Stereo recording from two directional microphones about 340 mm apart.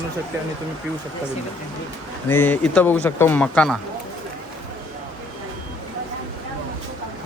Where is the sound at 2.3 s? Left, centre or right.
Centre.